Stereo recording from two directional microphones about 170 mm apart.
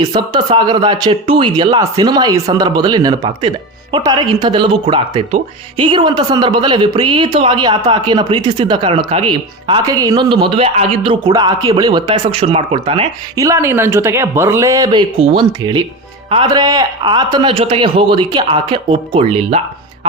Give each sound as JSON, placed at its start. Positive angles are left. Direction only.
{"t": 0.0, "sound": "speech", "side_deg": -25}
{"t": 13.3, "sound": "speech", "side_deg": -20}